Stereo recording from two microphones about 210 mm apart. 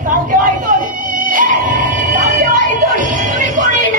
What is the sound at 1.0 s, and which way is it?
Music, 40° right (ahead or behind).